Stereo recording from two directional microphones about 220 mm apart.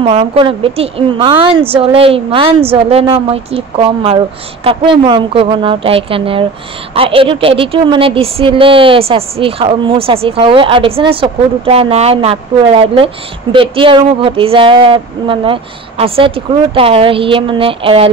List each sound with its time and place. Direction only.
0.0 s a woman's voice: 25° right (ahead or behind)